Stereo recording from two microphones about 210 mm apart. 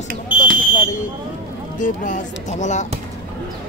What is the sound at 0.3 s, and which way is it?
Smoke detector, 5° right (ahead or behind).